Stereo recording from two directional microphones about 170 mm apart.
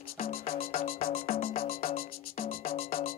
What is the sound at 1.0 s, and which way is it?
Music, 35° left (ahead or behind).